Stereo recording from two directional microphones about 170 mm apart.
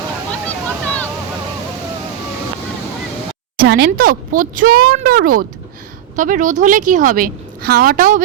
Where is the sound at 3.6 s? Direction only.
70° right (ahead or behind).